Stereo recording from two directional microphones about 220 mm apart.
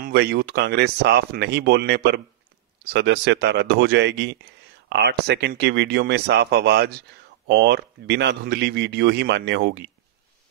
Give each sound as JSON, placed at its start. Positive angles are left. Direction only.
{"t": 0.0, "sound": "a man's voice", "side_deg": -45}